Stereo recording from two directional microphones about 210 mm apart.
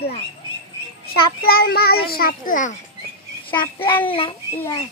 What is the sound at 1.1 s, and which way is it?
A child's voice, 45° left (ahead or behind).